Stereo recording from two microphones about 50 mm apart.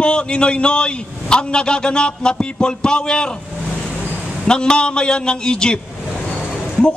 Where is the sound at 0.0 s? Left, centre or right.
Centre.